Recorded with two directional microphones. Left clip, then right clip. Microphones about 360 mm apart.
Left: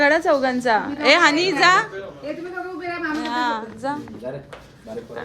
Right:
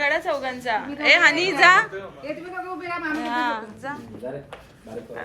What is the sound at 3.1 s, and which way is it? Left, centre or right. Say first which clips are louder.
Speech: left 2 dB; centre.